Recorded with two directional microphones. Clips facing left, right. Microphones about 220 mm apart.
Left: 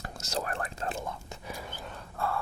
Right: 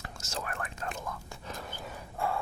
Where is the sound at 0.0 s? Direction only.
40° left (ahead or behind).